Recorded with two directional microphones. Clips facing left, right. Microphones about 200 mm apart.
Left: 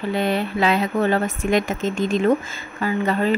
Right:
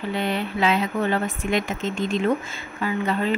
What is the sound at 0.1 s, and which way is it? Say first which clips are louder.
Speech: left 4 dB; 40° left (ahead or behind).